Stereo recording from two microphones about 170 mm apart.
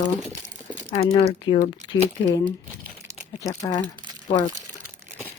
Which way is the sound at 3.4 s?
20° left (ahead or behind).